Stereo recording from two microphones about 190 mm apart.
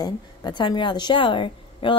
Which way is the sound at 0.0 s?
20° left (ahead or behind).